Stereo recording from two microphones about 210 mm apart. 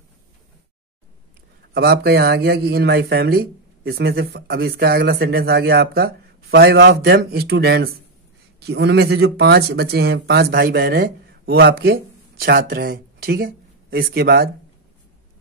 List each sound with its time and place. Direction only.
1.7 s speech: 45° right (ahead or behind)